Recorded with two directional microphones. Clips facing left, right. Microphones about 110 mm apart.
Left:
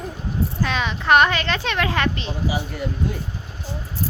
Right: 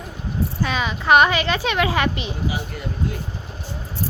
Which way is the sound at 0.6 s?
5° right (ahead or behind).